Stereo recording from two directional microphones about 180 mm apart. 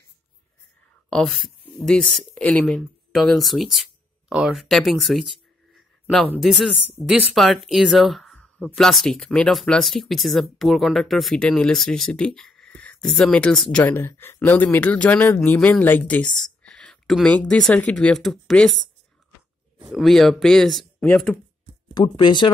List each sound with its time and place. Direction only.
1.1 s speech: centre (ahead or behind)
5.8 s a sound: centre (ahead or behind)
6.3 s speech: centre (ahead or behind)
16.3 s a sound: 5° left (ahead or behind)
17.8 s speech: 5° left (ahead or behind)
19.9 s speech: centre (ahead or behind)
21.9 s speech: 25° left (ahead or behind)